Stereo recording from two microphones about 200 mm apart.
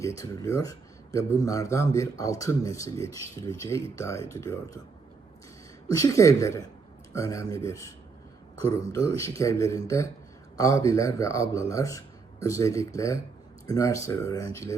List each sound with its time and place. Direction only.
0.0 s speech: 15° left (ahead or behind)
3.9 s speech: 15° left (ahead or behind)
5.9 s speech: 15° left (ahead or behind)